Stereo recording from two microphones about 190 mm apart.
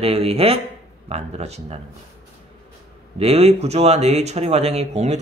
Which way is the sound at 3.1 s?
35° right (ahead or behind).